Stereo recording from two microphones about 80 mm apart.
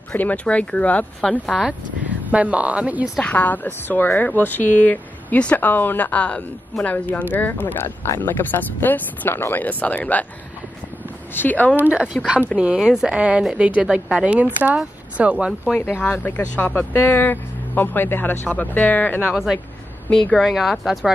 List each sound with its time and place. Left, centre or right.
0.1 s speech: left
1.4 s speech: centre
2.3 s speech: centre
3.2 s speech: centre
11.3 s speech: left
11.8 s speech: centre
15.8 s speech: left
20.2 s speech: centre